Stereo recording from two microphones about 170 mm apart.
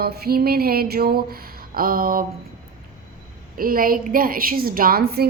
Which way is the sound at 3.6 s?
55° right (ahead or behind).